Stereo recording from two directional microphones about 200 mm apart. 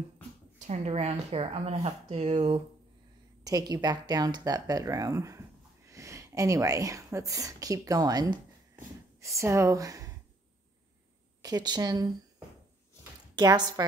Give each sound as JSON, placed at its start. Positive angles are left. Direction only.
{"t": 0.6, "sound": "a woman's voice", "side_deg": -35}
{"t": 11.4, "sound": "speech", "side_deg": -20}
{"t": 13.4, "sound": "speech", "side_deg": -20}